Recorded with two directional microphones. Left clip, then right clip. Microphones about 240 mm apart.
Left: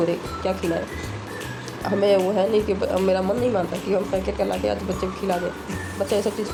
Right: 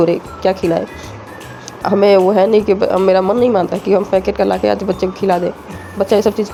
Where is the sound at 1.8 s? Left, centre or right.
Right.